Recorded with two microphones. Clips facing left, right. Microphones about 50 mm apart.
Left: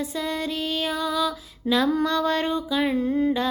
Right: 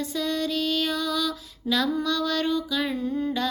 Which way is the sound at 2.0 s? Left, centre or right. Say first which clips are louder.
Left 3 dB; left.